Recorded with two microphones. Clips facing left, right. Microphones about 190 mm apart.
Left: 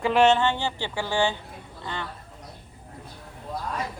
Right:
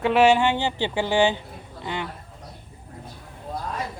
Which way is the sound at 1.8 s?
15° right (ahead or behind).